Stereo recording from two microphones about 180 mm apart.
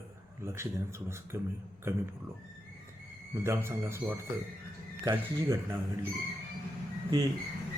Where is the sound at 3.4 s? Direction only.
15° right (ahead or behind).